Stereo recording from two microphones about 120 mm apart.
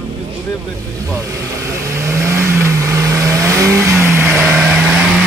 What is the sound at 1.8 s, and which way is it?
Vehicle, 25° right (ahead or behind).